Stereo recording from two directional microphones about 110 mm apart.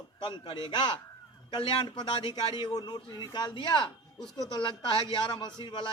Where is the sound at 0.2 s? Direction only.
45° left (ahead or behind).